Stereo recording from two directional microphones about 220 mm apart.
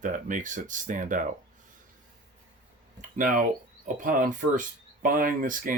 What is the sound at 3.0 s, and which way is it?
Speech, 35° right (ahead or behind).